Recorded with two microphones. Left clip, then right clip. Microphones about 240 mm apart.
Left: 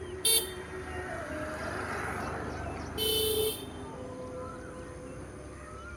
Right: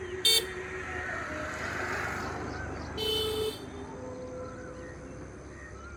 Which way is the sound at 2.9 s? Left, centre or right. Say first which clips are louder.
Even; right.